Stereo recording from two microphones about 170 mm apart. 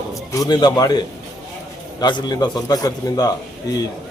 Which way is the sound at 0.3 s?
20° left (ahead or behind).